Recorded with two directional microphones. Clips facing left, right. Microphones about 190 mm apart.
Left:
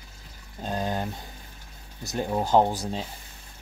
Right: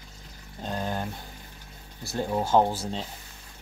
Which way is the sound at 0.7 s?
15° left (ahead or behind).